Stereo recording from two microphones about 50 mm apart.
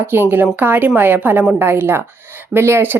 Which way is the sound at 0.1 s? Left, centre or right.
Right.